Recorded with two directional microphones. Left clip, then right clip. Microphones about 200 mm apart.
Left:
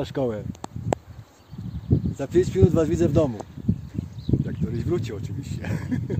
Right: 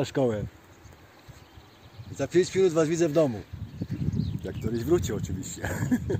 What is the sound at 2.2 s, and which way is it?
Speech, 50° left (ahead or behind).